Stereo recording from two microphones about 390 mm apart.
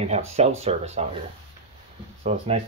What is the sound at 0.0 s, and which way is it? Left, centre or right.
Speech, centre.